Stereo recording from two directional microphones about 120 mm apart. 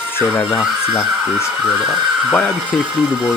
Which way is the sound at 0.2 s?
15° left (ahead or behind).